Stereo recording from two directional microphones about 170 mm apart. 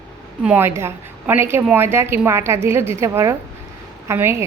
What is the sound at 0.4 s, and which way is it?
A woman's voice, 10° right (ahead or behind).